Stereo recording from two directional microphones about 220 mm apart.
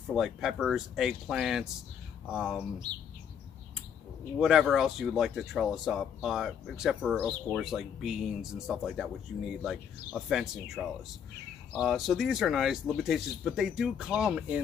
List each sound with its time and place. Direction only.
0.1 s speech: centre (ahead or behind)
4.4 s speech: centre (ahead or behind)